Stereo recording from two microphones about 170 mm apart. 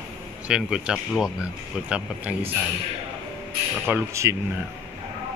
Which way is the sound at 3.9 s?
15° right (ahead or behind).